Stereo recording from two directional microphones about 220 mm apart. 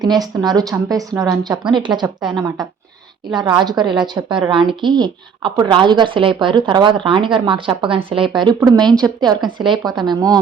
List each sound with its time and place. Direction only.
0.0 s a woman's voice: 20° right (ahead or behind)